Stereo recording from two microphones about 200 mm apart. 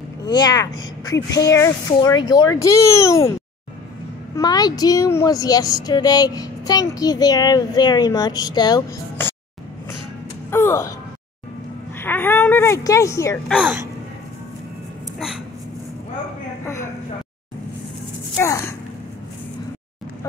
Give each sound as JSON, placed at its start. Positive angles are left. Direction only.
{"t": 0.2, "sound": "a child's voice", "side_deg": 20}
{"t": 4.4, "sound": "speech", "side_deg": 20}
{"t": 10.5, "sound": "a sound", "side_deg": 15}
{"t": 12.0, "sound": "a child's voice", "side_deg": 10}
{"t": 13.5, "sound": "speech", "side_deg": 0}
{"t": 18.4, "sound": "a sound", "side_deg": 15}